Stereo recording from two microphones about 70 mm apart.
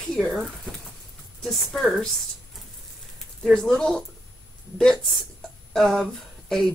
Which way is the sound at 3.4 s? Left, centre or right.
Centre.